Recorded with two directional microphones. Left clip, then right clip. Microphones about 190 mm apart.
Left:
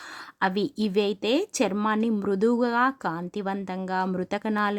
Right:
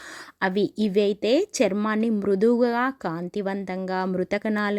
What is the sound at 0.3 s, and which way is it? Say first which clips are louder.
A woman's voice: right 2 dB; 10° right (ahead or behind).